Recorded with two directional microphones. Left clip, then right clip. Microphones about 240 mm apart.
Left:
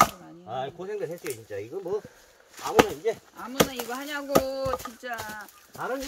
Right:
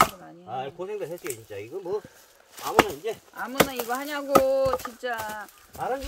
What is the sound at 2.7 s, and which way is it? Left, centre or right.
Speech, centre.